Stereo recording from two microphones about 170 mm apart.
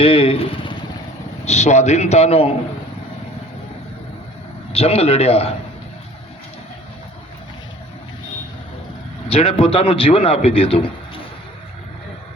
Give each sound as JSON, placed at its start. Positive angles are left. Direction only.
{"t": 0.0, "sound": "vehicle", "side_deg": 35}
{"t": 1.5, "sound": "a man's voice", "side_deg": 40}
{"t": 4.7, "sound": "a man's voice", "side_deg": 35}
{"t": 9.3, "sound": "a man's voice", "side_deg": 35}